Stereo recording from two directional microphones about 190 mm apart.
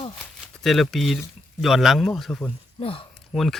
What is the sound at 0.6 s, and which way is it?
Speech, centre (ahead or behind).